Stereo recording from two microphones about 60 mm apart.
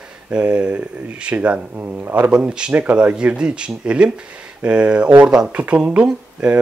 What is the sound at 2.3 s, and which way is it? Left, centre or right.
Speech, centre.